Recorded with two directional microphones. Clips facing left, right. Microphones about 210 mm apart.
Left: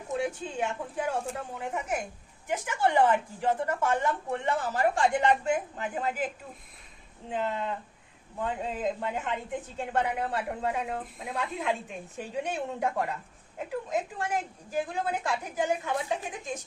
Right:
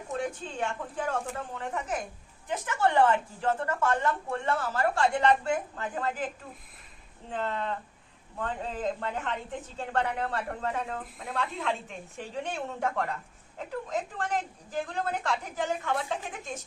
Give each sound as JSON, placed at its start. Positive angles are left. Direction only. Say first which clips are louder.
{"t": 0.1, "sound": "a woman's voice", "louder": "left 2 dB", "side_deg": 10}
{"t": 7.3, "sound": "a woman's voice", "louder": "left 1 dB", "side_deg": 10}